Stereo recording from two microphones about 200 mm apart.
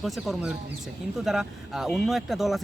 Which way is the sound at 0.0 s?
Centre (ahead or behind).